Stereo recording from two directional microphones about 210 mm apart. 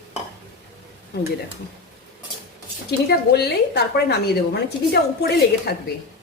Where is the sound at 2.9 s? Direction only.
50° left (ahead or behind).